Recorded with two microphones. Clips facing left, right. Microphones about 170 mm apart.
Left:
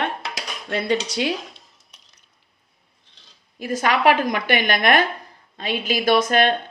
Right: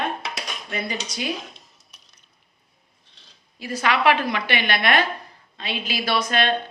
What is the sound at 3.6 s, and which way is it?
A woman's voice, 45° left (ahead or behind).